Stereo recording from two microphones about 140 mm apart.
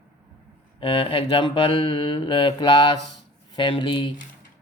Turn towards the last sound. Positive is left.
turn(degrees=35)  # may be behind; listen again after turning